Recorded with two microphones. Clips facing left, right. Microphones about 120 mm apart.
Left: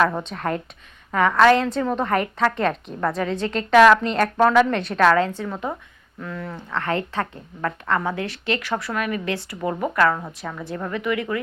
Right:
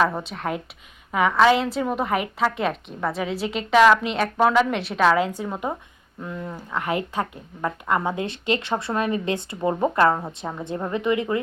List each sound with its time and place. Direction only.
0.0 s a woman's voice: 5° right (ahead or behind); by 11.3 s 25° right (ahead or behind)